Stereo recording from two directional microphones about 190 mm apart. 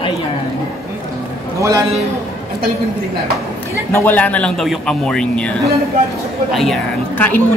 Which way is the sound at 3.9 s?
10° left (ahead or behind).